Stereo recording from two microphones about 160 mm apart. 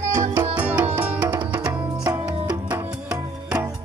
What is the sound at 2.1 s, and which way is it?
Music, 20° right (ahead or behind).